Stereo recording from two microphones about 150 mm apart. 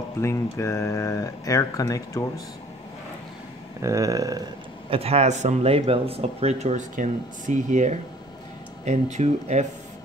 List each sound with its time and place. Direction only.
0.2 s speech: 20° left (ahead or behind)
3.8 s speech: 20° right (ahead or behind)
4.8 s speech: 40° right (ahead or behind)